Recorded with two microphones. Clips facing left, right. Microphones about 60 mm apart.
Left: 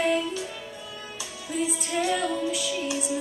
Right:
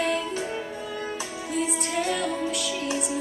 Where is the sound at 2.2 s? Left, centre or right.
Right.